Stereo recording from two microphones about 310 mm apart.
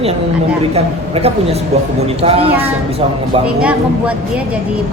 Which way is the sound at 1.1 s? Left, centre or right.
Centre.